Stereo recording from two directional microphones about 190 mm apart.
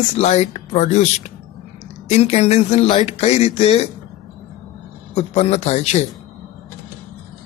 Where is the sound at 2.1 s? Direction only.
35° left (ahead or behind).